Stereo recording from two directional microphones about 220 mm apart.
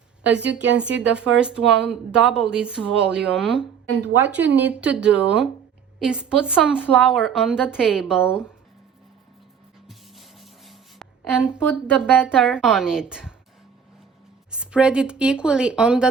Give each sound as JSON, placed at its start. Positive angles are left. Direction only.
{"t": 0.6, "sound": "speech", "side_deg": -55}
{"t": 0.9, "sound": "speech", "side_deg": -5}
{"t": 9.8, "sound": "a sound", "side_deg": 0}
{"t": 12.2, "sound": "speech", "side_deg": -5}
{"t": 14.5, "sound": "speech", "side_deg": -5}